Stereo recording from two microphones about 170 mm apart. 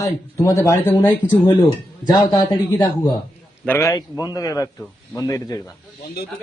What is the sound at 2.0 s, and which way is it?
A man's voice, 25° left (ahead or behind).